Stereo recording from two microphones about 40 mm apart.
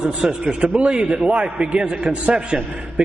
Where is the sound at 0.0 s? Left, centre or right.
Centre.